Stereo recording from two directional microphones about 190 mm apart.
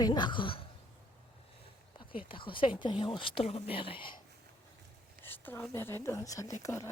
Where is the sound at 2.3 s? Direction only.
25° left (ahead or behind).